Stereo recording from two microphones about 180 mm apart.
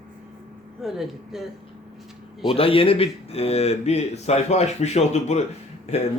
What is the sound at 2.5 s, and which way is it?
Speech, 30° left (ahead or behind).